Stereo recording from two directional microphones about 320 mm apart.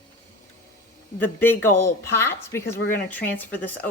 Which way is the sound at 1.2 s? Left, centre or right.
Centre.